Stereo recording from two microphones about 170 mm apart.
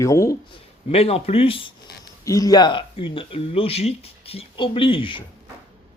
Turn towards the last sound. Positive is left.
turn(degrees=30)  # may be behind; listen again after turning